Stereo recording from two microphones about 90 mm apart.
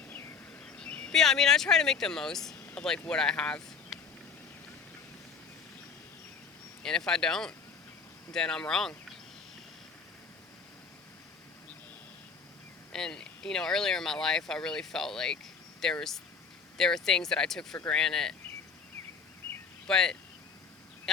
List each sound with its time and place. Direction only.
0.1 s a sound: 30° left (ahead or behind)
0.6 s speech: 10° left (ahead or behind)
6.8 s speech: 5° left (ahead or behind)
12.9 s speech: 5° left (ahead or behind)
19.9 s speech: 5° left (ahead or behind)